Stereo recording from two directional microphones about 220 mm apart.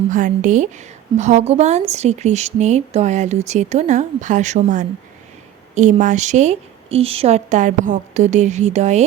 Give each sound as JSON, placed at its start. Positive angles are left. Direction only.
{"t": 0.1, "sound": "a woman's voice", "side_deg": -35}